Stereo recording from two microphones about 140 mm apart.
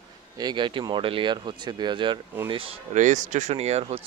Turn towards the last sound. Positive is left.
turn(degrees=-50)  # may be behind; listen again after turning